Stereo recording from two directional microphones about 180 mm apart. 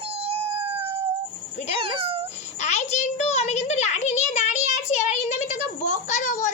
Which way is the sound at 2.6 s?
40° left (ahead or behind).